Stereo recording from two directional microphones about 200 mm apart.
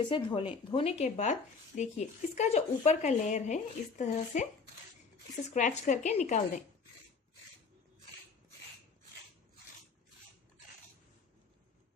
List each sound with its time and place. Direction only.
0.1 s speech: 25° left (ahead or behind)
5.5 s speech: 35° left (ahead or behind)